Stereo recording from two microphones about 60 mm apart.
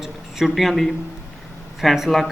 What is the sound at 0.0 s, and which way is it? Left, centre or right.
A man's voice, centre.